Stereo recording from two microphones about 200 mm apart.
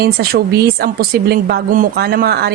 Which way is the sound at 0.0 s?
50° right (ahead or behind).